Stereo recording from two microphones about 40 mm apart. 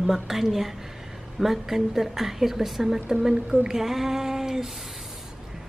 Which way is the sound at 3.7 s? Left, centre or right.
Centre.